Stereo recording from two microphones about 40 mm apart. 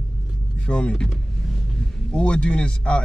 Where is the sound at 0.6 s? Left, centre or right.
Left.